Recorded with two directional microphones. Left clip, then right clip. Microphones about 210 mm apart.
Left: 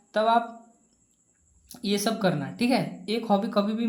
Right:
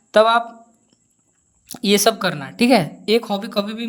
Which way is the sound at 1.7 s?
30° right (ahead or behind).